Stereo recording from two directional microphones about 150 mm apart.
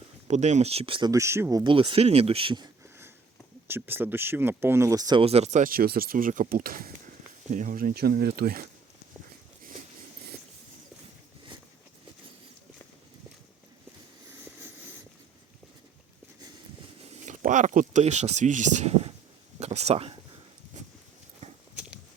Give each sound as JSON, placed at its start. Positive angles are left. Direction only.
{"t": 0.3, "sound": "speech", "side_deg": -50}
{"t": 1.1, "sound": "speech", "side_deg": -20}
{"t": 1.6, "sound": "speech", "side_deg": -35}
{"t": 3.7, "sound": "speech", "side_deg": -15}
{"t": 5.2, "sound": "speech", "side_deg": -45}
{"t": 7.5, "sound": "speech", "side_deg": -60}
{"t": 17.2, "sound": "speech", "side_deg": -55}
{"t": 19.5, "sound": "a sound", "side_deg": -45}
{"t": 21.4, "sound": "horse", "side_deg": -50}